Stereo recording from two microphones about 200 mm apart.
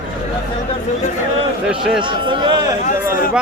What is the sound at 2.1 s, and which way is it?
Speech, 25° right (ahead or behind).